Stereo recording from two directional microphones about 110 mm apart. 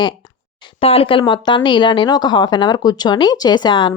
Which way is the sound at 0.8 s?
60° left (ahead or behind).